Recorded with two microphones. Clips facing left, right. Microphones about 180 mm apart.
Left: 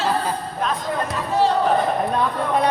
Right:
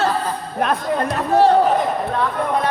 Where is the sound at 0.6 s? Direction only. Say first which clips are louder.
Right 5 dB; 65° right (ahead or behind).